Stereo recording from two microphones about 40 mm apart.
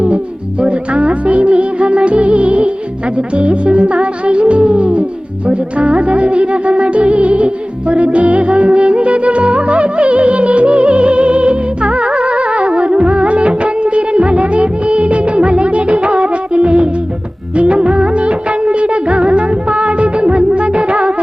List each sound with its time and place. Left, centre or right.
0.6 s music: right
17.5 s music of bollywood: right